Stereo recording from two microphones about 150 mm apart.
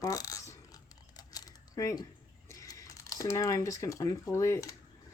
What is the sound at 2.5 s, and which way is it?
Speech, 20° left (ahead or behind).